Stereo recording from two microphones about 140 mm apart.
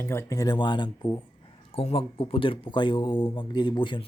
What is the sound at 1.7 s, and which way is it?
Speech, 45° left (ahead or behind).